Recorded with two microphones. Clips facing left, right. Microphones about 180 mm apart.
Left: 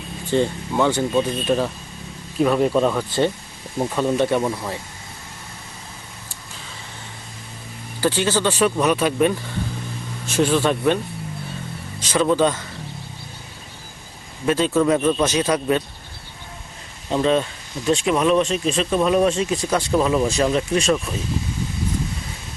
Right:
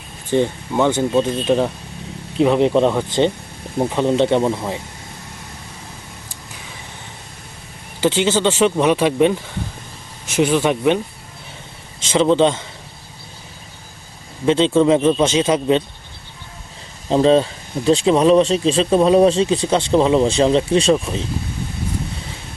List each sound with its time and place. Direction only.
0.3 s speech: 15° right (ahead or behind)
8.0 s speech: 20° right (ahead or behind)
14.4 s speech: 25° right (ahead or behind)
17.1 s speech: 30° right (ahead or behind)